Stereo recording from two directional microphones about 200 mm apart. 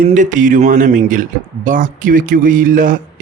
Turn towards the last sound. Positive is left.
turn(degrees=-45)  # may be behind; listen again after turning